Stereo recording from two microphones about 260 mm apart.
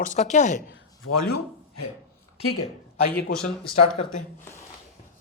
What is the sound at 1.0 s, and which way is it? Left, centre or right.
Speech, left.